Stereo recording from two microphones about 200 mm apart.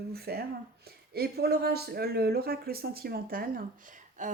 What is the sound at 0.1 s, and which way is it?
Speech, 50° right (ahead or behind).